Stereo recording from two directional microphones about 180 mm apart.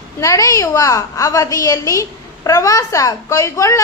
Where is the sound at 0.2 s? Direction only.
15° left (ahead or behind).